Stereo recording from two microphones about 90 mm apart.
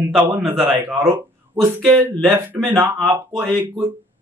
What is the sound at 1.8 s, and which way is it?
Speech, 10° left (ahead or behind).